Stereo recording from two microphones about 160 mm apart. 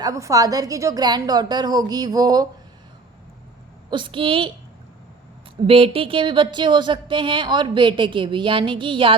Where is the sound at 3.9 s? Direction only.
30° right (ahead or behind).